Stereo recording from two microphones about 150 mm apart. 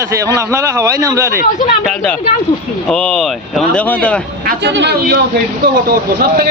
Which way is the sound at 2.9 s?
5° left (ahead or behind).